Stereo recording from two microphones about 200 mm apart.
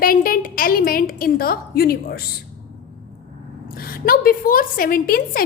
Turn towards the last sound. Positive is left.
turn(degrees=45)  # may be behind; listen again after turning